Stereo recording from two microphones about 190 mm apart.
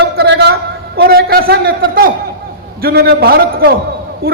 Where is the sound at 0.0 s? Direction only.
60° right (ahead or behind).